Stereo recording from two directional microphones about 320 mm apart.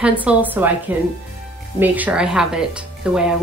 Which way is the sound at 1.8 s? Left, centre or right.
Centre.